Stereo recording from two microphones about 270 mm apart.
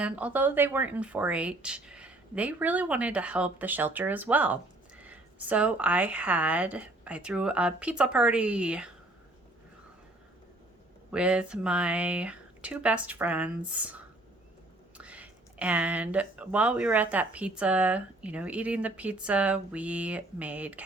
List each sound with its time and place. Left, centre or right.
0.0 s speech: centre
11.1 s speech: centre